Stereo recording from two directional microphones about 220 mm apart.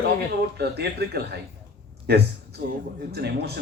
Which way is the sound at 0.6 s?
45° right (ahead or behind).